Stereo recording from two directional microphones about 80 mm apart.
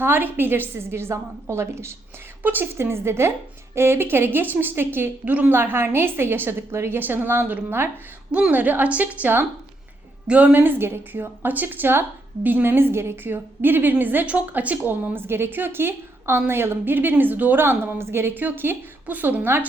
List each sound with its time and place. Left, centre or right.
0.0 s a woman's voice: right